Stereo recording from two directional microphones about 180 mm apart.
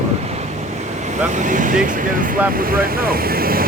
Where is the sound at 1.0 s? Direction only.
40° right (ahead or behind).